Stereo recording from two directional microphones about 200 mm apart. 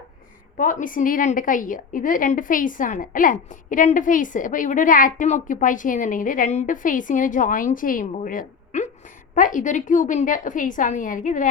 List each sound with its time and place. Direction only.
0.5 s a woman's voice: 40° left (ahead or behind)